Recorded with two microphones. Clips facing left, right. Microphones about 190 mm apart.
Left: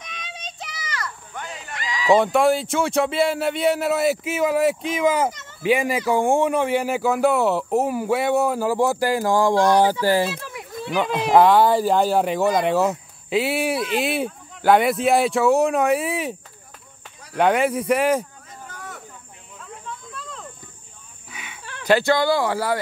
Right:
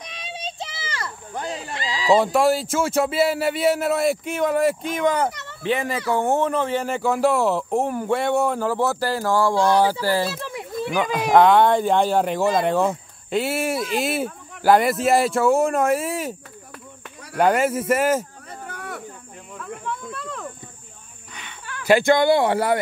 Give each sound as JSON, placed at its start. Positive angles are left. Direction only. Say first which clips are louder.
{"t": 0.0, "sound": "a sound", "louder": "right 4 dB", "side_deg": -35}
{"t": 2.0, "sound": "speech", "louder": "left 1 dB", "side_deg": 0}
{"t": 5.3, "sound": "a sound", "louder": "right 4 dB", "side_deg": -65}
{"t": 5.6, "sound": "speech", "louder": "left 4 dB", "side_deg": 10}
{"t": 10.9, "sound": "speech", "louder": "left 1 dB", "side_deg": 0}
{"t": 17.4, "sound": "speech", "louder": "even", "side_deg": 0}
{"t": 18.5, "sound": "a sound", "louder": "right 4 dB", "side_deg": -65}
{"t": 19.6, "sound": "cricket", "louder": "right 6 dB", "side_deg": -65}
{"t": 21.3, "sound": "snake", "louder": "left 1 dB", "side_deg": 10}
{"t": 21.8, "sound": "speech", "louder": "right 2 dB", "side_deg": -15}